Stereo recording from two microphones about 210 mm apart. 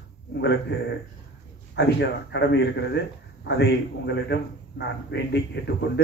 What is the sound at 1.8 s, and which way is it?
A man's voice, 55° left (ahead or behind).